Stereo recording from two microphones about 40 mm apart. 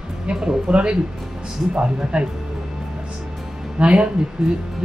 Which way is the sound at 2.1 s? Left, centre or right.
Right.